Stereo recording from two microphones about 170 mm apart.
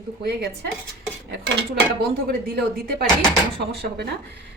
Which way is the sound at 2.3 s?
60° right (ahead or behind).